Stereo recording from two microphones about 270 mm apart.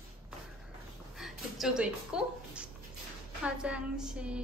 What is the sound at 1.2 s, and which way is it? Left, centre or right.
A woman's voice, centre.